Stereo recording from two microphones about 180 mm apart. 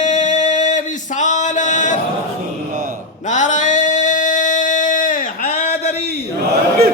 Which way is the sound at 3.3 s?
45° left (ahead or behind).